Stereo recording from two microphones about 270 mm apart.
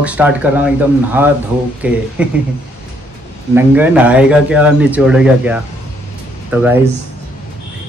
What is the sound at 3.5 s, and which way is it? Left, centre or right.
Speech, centre.